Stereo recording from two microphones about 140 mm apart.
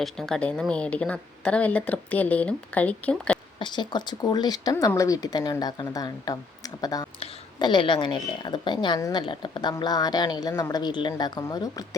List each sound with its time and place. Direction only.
0.0 s a woman's voice: 5° left (ahead or behind)
3.6 s a woman's voice: 35° left (ahead or behind)